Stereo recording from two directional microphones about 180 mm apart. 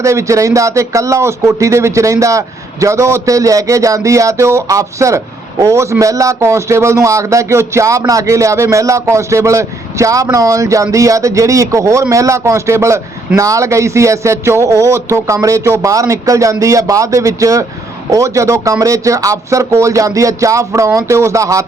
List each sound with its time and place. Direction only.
0.0 s speech: 15° right (ahead or behind)